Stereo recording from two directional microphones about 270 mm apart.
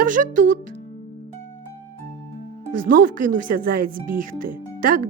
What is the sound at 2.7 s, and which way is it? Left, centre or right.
A woman's voice, right.